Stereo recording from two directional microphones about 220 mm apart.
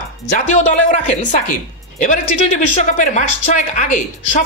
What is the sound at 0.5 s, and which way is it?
Speech, 35° left (ahead or behind).